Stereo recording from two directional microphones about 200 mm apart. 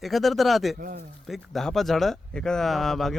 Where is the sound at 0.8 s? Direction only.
45° right (ahead or behind).